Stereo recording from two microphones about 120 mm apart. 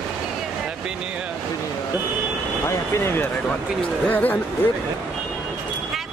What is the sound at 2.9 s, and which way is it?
Speech, 20° left (ahead or behind).